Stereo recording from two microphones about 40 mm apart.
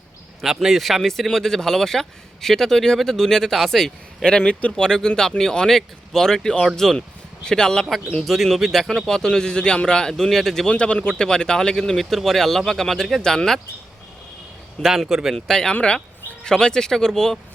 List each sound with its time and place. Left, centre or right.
0.4 s speech: centre
4.6 s speech: left
4.9 s speech: centre
8.2 s speech: centre; by 10.1 s left
10.1 s speech: centre
10.7 s a man's voice: left
14.8 s speech: centre
15.4 s speech: centre